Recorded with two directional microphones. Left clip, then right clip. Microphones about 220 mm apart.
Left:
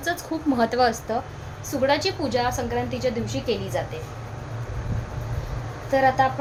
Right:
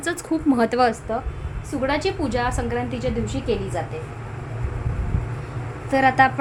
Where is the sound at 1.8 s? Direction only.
5° right (ahead or behind).